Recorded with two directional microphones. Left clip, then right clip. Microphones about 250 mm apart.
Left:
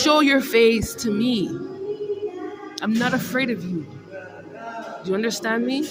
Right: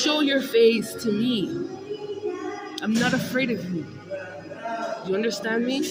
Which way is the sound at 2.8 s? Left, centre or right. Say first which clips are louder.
Left 2 dB; centre.